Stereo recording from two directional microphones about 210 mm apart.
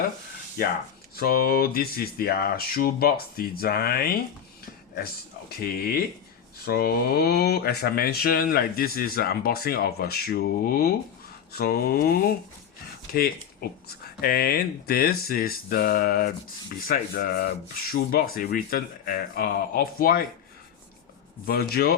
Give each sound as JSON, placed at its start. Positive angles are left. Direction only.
{"t": 1.1, "sound": "speech", "side_deg": 45}
{"t": 21.4, "sound": "speech", "side_deg": 45}